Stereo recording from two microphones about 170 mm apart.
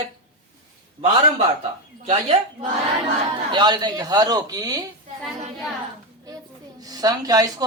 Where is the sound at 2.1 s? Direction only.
35° right (ahead or behind).